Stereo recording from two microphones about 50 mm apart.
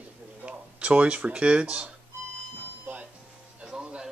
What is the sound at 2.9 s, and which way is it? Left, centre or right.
Music, right.